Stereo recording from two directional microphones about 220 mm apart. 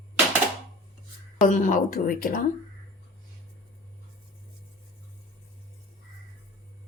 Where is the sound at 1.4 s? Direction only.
35° left (ahead or behind).